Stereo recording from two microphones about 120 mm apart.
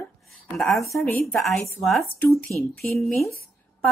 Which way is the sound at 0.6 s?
Centre (ahead or behind).